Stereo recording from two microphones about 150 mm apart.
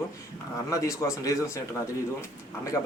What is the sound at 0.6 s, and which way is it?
Speech, 20° left (ahead or behind).